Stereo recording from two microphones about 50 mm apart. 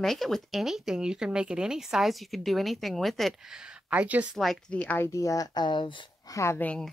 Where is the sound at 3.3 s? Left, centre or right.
Centre.